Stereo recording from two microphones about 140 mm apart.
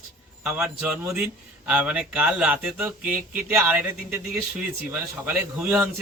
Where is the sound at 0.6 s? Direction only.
15° right (ahead or behind).